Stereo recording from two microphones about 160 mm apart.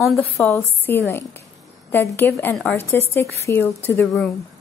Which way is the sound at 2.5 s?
Centre (ahead or behind).